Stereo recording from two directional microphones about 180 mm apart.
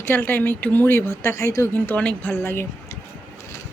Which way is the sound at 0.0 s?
10° left (ahead or behind).